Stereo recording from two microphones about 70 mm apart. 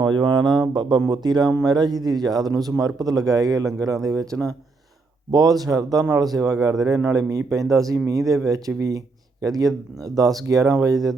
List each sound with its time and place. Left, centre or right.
0.0 s speech: right
5.3 s speech: right